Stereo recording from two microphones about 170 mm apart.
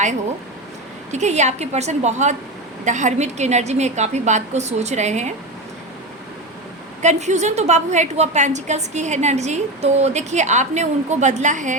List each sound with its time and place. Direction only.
1.1 s a woman's voice: 45° right (ahead or behind)
7.0 s a woman's voice: 45° right (ahead or behind)